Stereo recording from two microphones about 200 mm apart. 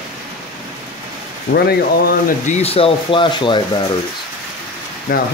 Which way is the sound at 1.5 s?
55° left (ahead or behind).